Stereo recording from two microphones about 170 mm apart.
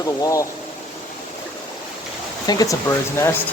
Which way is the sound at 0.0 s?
20° left (ahead or behind).